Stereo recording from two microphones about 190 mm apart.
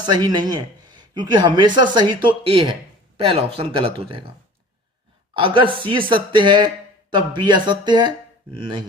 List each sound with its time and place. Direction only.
0.0 s a man's voice: 20° right (ahead or behind)
5.3 s a man's voice: 25° right (ahead or behind)